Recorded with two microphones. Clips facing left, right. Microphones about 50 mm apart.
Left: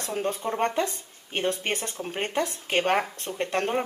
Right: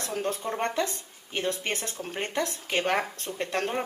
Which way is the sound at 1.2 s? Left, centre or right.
Left.